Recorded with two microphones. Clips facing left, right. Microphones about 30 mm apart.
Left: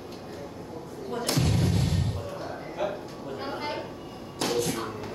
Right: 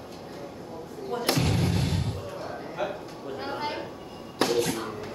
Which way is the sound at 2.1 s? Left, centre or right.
Centre.